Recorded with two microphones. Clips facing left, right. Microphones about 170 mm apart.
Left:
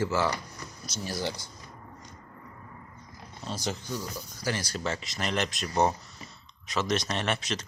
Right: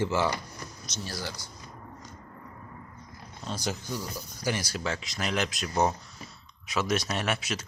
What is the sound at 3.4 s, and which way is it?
Speech, centre (ahead or behind).